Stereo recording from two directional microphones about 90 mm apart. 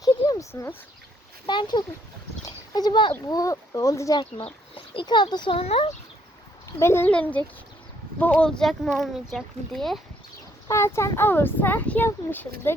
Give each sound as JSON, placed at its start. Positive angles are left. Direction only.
{"t": 0.0, "sound": "a sound", "side_deg": 45}
{"t": 0.5, "sound": "speech", "side_deg": 25}
{"t": 1.5, "sound": "a child's voice", "side_deg": 55}
{"t": 2.4, "sound": "a sound", "side_deg": 50}
{"t": 3.2, "sound": "speech", "side_deg": 40}
{"t": 4.2, "sound": "speech", "side_deg": 75}
{"t": 6.7, "sound": "speech", "side_deg": 30}
{"t": 7.1, "sound": "a child's voice", "side_deg": 15}
{"t": 10.7, "sound": "speech", "side_deg": 30}